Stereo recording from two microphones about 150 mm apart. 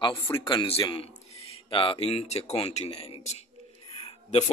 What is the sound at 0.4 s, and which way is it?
Speech, 35° left (ahead or behind).